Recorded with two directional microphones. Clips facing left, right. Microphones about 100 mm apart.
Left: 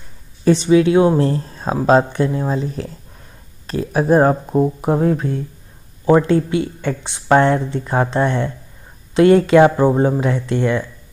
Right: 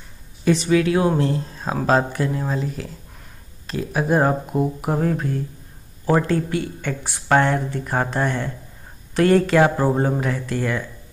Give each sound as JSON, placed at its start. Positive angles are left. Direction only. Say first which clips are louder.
{"t": 0.5, "sound": "speech", "louder": "left 5 dB", "side_deg": 25}
{"t": 1.1, "sound": "speech", "louder": "left 4 dB", "side_deg": 35}
{"t": 3.6, "sound": "speech", "louder": "left 5 dB", "side_deg": 35}
{"t": 6.3, "sound": "speech", "louder": "left 5 dB", "side_deg": 25}